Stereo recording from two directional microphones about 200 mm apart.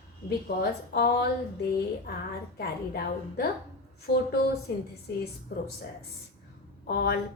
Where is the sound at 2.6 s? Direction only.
50° left (ahead or behind).